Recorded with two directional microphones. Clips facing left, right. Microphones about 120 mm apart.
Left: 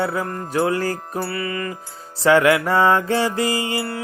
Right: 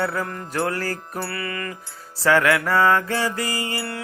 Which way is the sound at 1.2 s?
5° left (ahead or behind).